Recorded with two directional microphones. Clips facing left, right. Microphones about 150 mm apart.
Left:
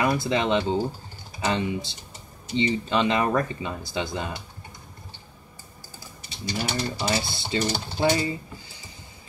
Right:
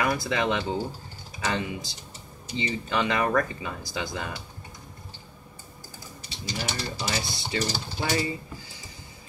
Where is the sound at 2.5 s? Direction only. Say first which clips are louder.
Left 5 dB; 25° left (ahead or behind).